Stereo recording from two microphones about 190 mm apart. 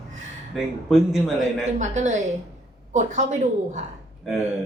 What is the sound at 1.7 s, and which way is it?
A woman's voice, 40° right (ahead or behind).